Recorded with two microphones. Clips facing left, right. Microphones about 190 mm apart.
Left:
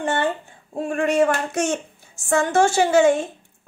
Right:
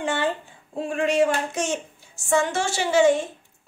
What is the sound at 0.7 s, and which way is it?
A woman's voice, 50° left (ahead or behind).